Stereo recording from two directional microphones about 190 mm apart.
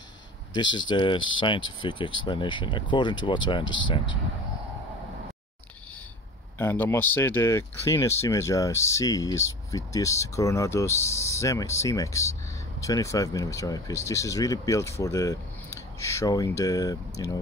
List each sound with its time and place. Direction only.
0.5 s speech: 25° left (ahead or behind)
6.6 s speech: 10° left (ahead or behind)